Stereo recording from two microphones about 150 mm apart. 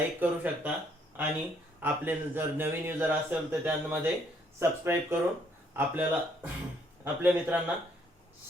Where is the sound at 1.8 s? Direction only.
15° right (ahead or behind).